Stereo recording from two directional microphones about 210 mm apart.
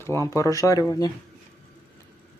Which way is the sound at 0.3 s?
15° left (ahead or behind).